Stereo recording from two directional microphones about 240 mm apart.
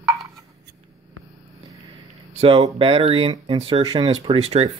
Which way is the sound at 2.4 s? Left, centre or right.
Right.